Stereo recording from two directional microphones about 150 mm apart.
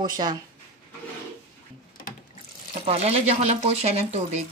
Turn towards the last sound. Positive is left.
turn(degrees=-50)  # may be behind; listen again after turning